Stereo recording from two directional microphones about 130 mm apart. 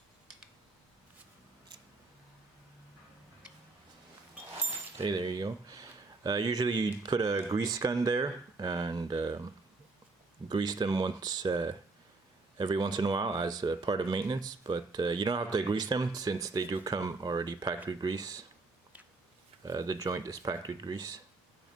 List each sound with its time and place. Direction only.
5.0 s speech: 35° right (ahead or behind)
10.5 s speech: 35° right (ahead or behind)
19.6 s speech: 30° right (ahead or behind)